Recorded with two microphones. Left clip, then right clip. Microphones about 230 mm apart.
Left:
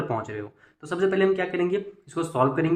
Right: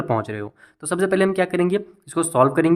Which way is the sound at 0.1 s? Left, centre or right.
Right.